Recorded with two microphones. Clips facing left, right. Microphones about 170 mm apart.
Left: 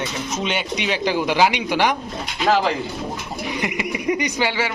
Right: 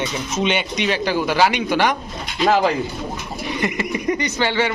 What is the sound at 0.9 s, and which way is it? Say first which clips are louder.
A man's voice: even; 15° left (ahead or behind).